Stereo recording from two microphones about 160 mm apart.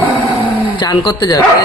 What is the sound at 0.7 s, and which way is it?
Speech, 25° left (ahead or behind).